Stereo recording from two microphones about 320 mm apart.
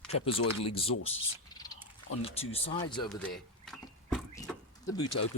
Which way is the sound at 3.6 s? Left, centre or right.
Centre.